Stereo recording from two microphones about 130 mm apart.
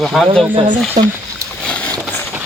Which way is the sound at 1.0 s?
65° right (ahead or behind).